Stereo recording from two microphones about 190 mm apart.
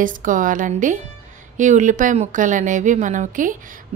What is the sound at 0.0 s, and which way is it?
A woman's voice, 45° right (ahead or behind).